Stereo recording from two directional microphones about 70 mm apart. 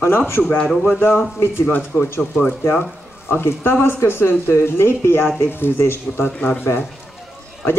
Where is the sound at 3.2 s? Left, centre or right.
Left.